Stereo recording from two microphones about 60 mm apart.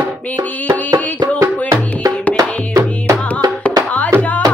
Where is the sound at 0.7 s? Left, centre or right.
Right.